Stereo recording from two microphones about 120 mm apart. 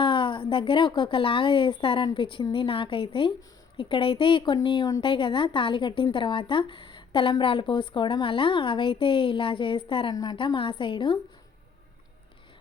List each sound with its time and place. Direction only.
0.0 s a woman's voice: 45° left (ahead or behind)